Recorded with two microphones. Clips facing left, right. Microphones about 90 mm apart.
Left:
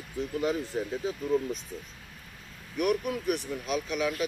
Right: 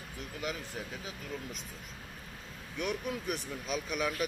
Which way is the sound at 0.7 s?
35° left (ahead or behind).